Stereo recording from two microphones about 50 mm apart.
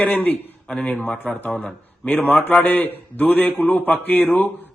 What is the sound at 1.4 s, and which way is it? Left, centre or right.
Speech, left.